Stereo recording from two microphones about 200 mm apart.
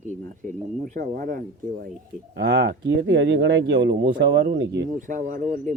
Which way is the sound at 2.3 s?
60° right (ahead or behind).